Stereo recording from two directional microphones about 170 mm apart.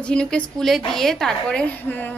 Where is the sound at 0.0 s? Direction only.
5° left (ahead or behind).